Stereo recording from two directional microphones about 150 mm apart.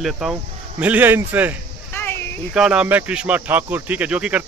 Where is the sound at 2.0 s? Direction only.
15° left (ahead or behind).